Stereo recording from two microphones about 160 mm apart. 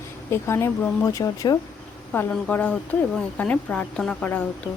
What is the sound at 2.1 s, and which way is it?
A woman's voice, 10° left (ahead or behind).